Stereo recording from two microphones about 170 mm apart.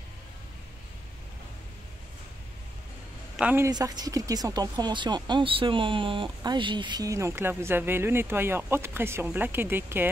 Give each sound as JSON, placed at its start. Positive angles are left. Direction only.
{"t": 3.3, "sound": "speech", "side_deg": -10}